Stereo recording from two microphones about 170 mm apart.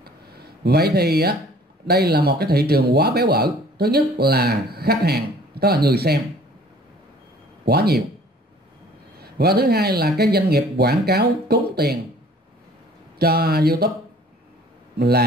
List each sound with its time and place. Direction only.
0.7 s speech: 70° right (ahead or behind)
7.6 s speech: 70° right (ahead or behind)
9.2 s speech: 65° right (ahead or behind)
13.2 s speech: 65° right (ahead or behind)
15.0 s speech: 70° right (ahead or behind)